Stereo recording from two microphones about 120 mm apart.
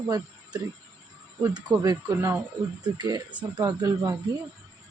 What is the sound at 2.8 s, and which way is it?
A woman's voice, 35° right (ahead or behind).